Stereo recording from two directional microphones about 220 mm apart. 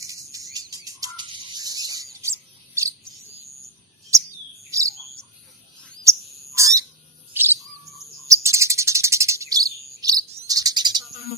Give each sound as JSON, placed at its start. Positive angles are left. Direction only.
{"t": 0.0, "sound": "cricket", "side_deg": -15}
{"t": 2.2, "sound": "bird", "side_deg": -10}
{"t": 4.7, "sound": "chirp", "side_deg": -15}
{"t": 6.1, "sound": "bird vocalization", "side_deg": -15}
{"t": 7.3, "sound": "bird", "side_deg": -10}
{"t": 10.4, "sound": "chirp", "side_deg": -15}